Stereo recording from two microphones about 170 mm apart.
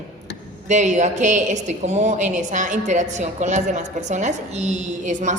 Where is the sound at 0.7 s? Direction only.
45° right (ahead or behind).